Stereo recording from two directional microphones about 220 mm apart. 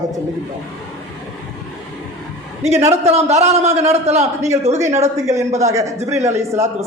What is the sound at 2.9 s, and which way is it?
A man's voice, 30° right (ahead or behind).